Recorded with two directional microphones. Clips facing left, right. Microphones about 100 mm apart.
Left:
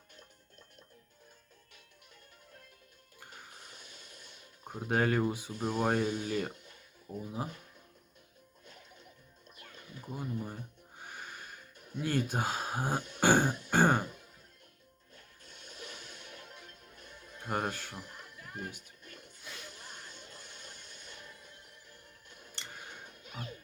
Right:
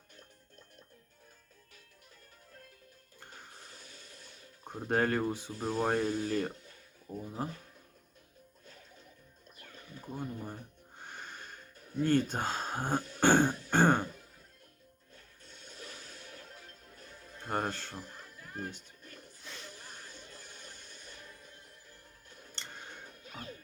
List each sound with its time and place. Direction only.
3.2 s music: 15° left (ahead or behind)
3.7 s water: 30° right (ahead or behind)
4.0 s a sound: 30° right (ahead or behind)
4.6 s speech: 10° left (ahead or behind)
9.9 s speech: 10° left (ahead or behind)
11.0 s music: 10° left (ahead or behind)
11.9 s speech: 10° left (ahead or behind)
13.1 s throat clearing: 10° left (ahead or behind)
15.7 s music: 35° right (ahead or behind)
17.4 s speech: 10° left (ahead or behind)
18.0 s music: 35° right (ahead or behind)
19.0 s a sound: 35° right (ahead or behind)
20.5 s music: 35° right (ahead or behind)
22.5 s scissors: 10° left (ahead or behind)